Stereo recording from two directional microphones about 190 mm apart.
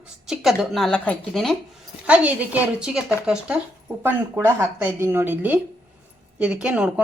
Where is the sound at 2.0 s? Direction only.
10° right (ahead or behind).